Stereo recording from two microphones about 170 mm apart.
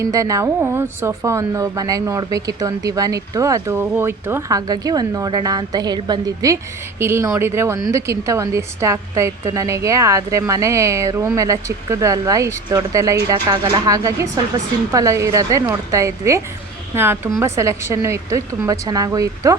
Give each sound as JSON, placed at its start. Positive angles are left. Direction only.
{"t": 0.0, "sound": "a woman's voice", "side_deg": -20}